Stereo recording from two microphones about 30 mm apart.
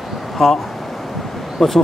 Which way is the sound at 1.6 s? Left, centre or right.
Centre.